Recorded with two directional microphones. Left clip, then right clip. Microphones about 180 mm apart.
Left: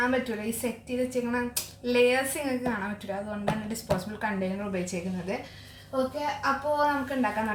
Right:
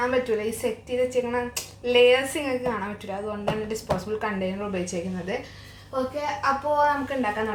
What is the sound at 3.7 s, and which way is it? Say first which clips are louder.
Speech: right 3 dB; 15° right (ahead or behind).